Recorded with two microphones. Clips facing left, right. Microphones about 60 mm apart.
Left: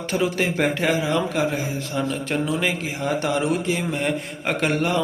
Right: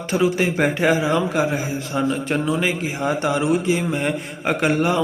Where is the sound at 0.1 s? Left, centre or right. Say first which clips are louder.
Right 4 dB; centre.